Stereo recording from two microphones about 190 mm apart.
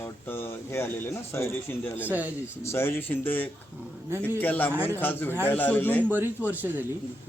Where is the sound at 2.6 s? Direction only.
15° left (ahead or behind).